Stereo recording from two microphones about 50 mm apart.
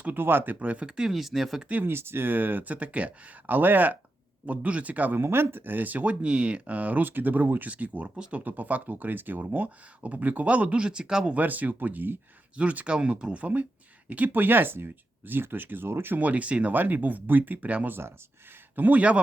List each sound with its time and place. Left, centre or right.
0.0 s speech: right
0.6 s speech: right
0.9 s speech: centre
1.8 s speech: right
4.4 s speech: right
5.1 s speech: right
7.7 s speech: right
8.4 s speech: right; by 11.3 s centre
11.3 s speech: right
12.5 s speech: right
16.1 s speech: right
16.7 s speech: right
18.8 s speech: right